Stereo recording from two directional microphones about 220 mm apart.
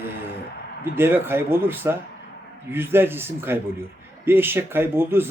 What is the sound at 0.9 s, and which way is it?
Speech, 10° right (ahead or behind).